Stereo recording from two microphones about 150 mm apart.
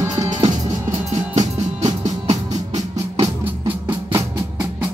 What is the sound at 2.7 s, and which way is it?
Music, 25° right (ahead or behind).